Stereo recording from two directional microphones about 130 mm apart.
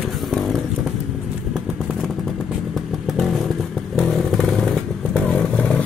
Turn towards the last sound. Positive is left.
turn(degrees=10)  # may be behind; listen again after turning